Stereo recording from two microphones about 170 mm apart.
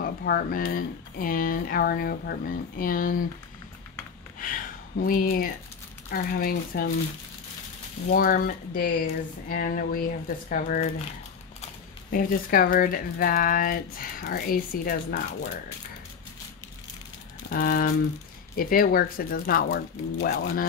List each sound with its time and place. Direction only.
0.0 s speech: 60° left (ahead or behind)
4.4 s speech: 55° left (ahead or behind)
8.1 s speech: 55° left (ahead or behind)
12.1 s speech: 55° left (ahead or behind)
17.5 s speech: 60° left (ahead or behind)